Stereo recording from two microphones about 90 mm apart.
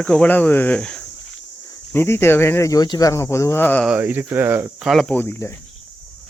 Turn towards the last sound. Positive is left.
turn(degrees=25)  # may be behind; listen again after turning